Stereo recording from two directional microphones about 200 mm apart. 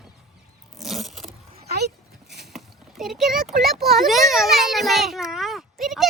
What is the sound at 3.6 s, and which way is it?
A child's voice, centre (ahead or behind).